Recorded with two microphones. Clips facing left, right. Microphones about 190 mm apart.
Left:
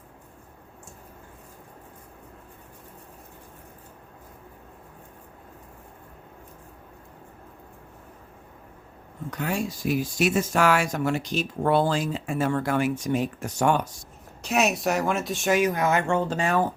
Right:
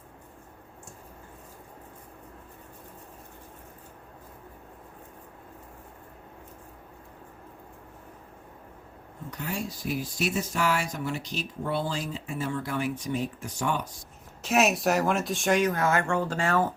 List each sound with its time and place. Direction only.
9.3 s speech: 90° left; by 13.8 s 75° left (ahead or behind)
14.4 s speech: centre (ahead or behind); by 16.7 s 15° left (ahead or behind)